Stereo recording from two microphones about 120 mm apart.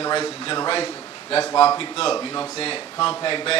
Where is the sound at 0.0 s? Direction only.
55° left (ahead or behind).